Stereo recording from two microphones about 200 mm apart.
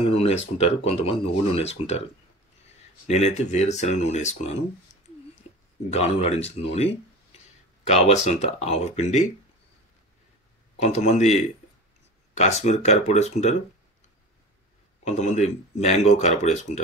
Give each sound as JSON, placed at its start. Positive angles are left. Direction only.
{"t": 0.0, "sound": "a sound", "side_deg": 30}
{"t": 0.6, "sound": "speech", "side_deg": 30}
{"t": 3.1, "sound": "speech", "side_deg": 35}
{"t": 5.9, "sound": "speech", "side_deg": 30}
{"t": 10.8, "sound": "speech", "side_deg": 35}
{"t": 12.4, "sound": "speech", "side_deg": 35}
{"t": 15.0, "sound": "speech", "side_deg": 35}